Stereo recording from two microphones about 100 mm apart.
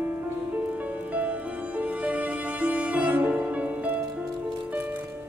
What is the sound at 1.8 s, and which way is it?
Music, 15° right (ahead or behind).